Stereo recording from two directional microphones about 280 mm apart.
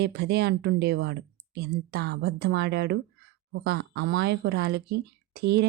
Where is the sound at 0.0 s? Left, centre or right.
Right.